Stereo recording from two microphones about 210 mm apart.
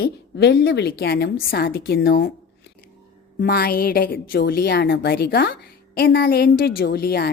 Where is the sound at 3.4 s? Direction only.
50° left (ahead or behind).